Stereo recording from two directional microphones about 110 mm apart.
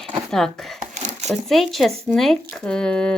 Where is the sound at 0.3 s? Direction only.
5° left (ahead or behind).